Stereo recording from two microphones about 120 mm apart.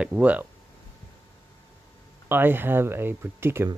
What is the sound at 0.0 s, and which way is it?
Speech, 10° right (ahead or behind).